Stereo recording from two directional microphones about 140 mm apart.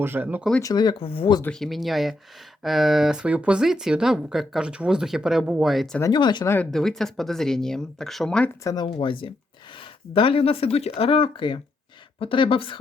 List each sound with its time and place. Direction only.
0.0 s speech: 15° right (ahead or behind)
0.6 s speech: 30° left (ahead or behind)
1.5 s speech: 5° left (ahead or behind)
6.0 s speech: 30° left (ahead or behind)
6.7 s speech: 5° left (ahead or behind)
8.6 s speech: 30° left (ahead or behind)